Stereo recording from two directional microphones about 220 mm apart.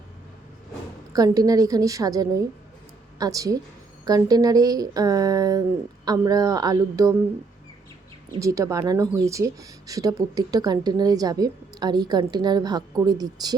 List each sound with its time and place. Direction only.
1.1 s speech: 15° right (ahead or behind)
8.3 s speech: 15° right (ahead or behind)